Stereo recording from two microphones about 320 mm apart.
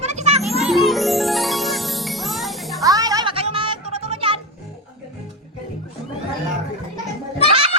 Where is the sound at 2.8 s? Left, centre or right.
Centre.